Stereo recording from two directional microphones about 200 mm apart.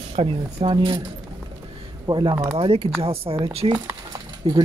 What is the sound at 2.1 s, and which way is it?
Speech, 20° right (ahead or behind).